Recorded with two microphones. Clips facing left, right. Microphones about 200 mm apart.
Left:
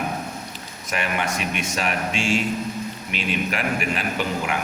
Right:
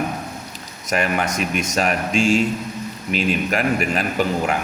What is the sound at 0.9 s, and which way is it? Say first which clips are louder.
A man's voice: right 5 dB; 40° right (ahead or behind).